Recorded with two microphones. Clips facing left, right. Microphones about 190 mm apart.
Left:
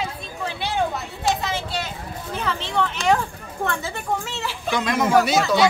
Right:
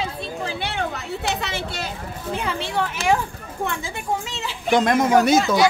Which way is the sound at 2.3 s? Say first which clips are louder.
Right 1 dB; 15° right (ahead or behind).